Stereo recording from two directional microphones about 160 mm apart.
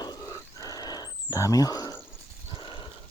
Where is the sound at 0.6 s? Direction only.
25° left (ahead or behind).